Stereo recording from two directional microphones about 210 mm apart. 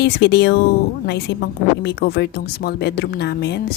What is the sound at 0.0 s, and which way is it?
Speech, 55° left (ahead or behind).